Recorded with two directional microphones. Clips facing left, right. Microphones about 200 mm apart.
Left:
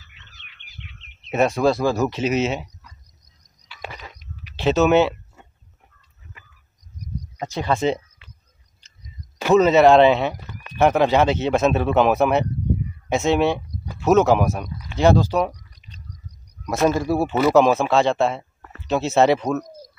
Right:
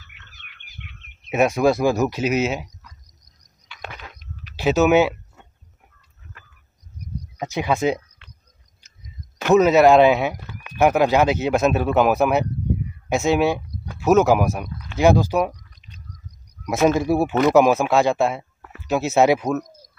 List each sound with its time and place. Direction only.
0.0 s bird: 55° right (ahead or behind)
1.3 s speech: 10° right (ahead or behind)
3.7 s a sound: 5° left (ahead or behind)
4.6 s speech: 5° right (ahead or behind)
7.0 s a sound: 10° right (ahead or behind)
9.6 s speech: 5° right (ahead or behind)
17.0 s speech: 15° right (ahead or behind)
17.3 s speech: 5° left (ahead or behind)
17.6 s speech: 10° right (ahead or behind)